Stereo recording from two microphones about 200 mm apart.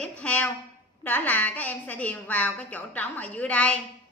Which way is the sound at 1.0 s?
10° left (ahead or behind).